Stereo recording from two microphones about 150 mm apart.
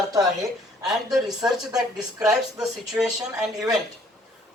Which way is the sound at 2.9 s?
10° right (ahead or behind).